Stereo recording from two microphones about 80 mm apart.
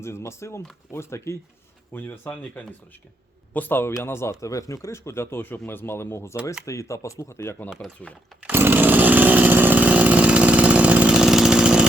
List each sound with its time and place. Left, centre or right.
0.0 s speech: left
1.9 s speech: left
8.4 s chainsaw: right; by 11.9 s centre